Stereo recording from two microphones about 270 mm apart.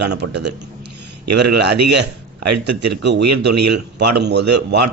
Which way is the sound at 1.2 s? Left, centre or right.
Right.